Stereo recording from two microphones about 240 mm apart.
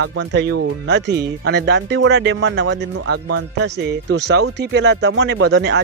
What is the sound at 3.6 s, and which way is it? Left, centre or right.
Speech, right.